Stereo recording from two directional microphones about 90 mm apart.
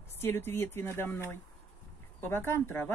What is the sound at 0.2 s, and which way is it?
Speech, 25° left (ahead or behind).